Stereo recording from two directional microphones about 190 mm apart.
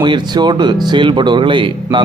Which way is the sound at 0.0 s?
25° right (ahead or behind).